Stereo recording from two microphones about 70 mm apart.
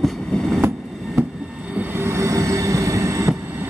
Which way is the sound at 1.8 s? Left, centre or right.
Right.